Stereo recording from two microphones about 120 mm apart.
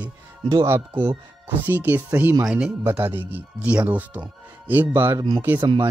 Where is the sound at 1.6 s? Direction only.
15° right (ahead or behind).